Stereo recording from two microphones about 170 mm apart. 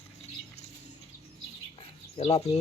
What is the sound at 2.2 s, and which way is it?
Speech, 40° left (ahead or behind).